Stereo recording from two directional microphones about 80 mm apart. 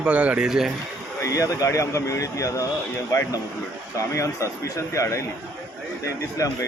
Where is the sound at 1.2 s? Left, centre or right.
Left.